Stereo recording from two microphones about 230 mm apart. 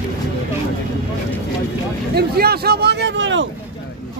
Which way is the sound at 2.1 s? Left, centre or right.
Right.